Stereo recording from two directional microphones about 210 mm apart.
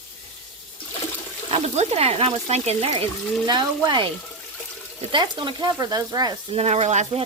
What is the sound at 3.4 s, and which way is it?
Speech, 20° right (ahead or behind).